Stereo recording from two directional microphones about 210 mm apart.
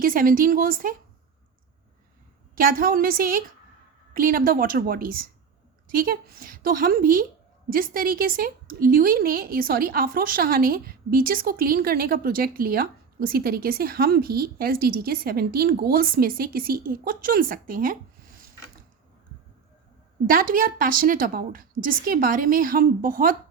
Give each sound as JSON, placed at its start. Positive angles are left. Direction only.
{"t": 0.0, "sound": "a woman's voice", "side_deg": -40}
{"t": 2.6, "sound": "speech", "side_deg": -40}
{"t": 20.2, "sound": "a woman's voice", "side_deg": -40}